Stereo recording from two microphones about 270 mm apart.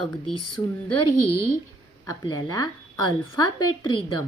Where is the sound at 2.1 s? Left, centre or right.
Centre.